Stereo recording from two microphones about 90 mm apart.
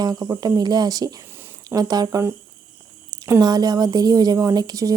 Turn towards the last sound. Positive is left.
turn(degrees=-40)  # may be behind; listen again after turning